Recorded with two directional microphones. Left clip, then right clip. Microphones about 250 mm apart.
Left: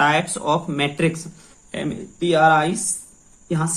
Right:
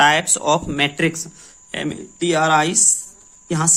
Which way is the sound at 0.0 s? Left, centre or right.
Right.